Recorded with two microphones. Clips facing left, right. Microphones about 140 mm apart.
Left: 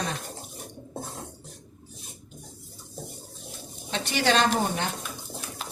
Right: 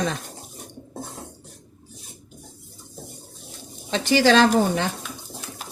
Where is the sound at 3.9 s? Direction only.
90° right.